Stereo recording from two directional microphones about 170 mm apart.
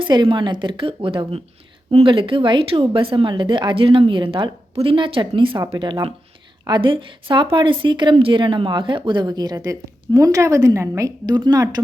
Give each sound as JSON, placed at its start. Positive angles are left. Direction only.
{"t": 0.0, "sound": "a woman's voice", "side_deg": -25}